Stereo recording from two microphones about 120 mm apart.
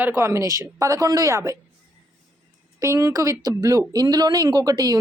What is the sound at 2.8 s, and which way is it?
Speech, 25° right (ahead or behind).